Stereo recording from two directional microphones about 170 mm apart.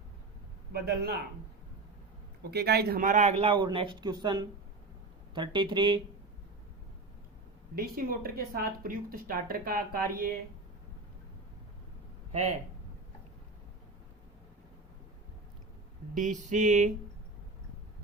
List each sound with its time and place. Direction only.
0.7 s a man's voice: 70° right (ahead or behind)
2.5 s speech: 75° right (ahead or behind); by 6.0 s 25° right (ahead or behind)
7.8 s speech: 60° right (ahead or behind)
12.3 s speech: 40° right (ahead or behind)
16.1 s a sound: 45° right (ahead or behind)